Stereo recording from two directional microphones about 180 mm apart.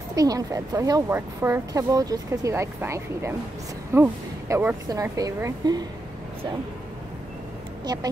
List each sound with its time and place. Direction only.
0.1 s a woman's voice: 20° right (ahead or behind)
7.8 s speech: 20° right (ahead or behind)